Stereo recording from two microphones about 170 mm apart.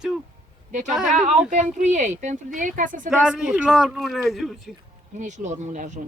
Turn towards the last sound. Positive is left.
turn(degrees=-50)  # may be behind; listen again after turning